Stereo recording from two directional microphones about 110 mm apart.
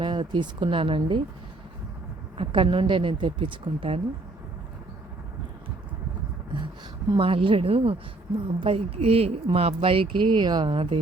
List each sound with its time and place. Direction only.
0.0 s a woman's voice: 45° right (ahead or behind)
2.4 s a woman's voice: 50° right (ahead or behind)
7.2 s speech: 55° right (ahead or behind)